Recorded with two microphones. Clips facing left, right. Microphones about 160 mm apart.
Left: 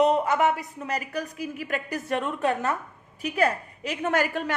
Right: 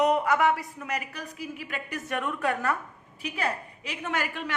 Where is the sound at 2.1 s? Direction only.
30° left (ahead or behind).